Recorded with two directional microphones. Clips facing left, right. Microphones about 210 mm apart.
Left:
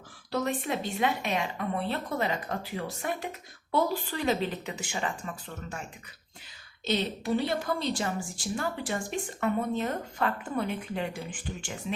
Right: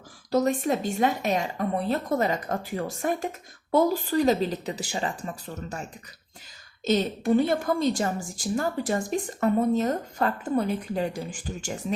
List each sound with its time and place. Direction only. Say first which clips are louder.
0.3 s a woman's voice: right 7 dB; 40° right (ahead or behind)
6.8 s a woman's voice: right 6 dB; 45° right (ahead or behind)